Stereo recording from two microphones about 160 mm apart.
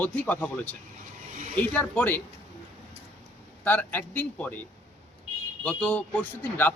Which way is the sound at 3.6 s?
10° left (ahead or behind).